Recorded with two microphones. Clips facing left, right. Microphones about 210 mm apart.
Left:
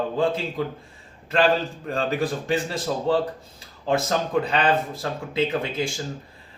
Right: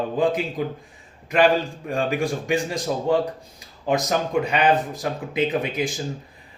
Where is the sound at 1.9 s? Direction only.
15° right (ahead or behind).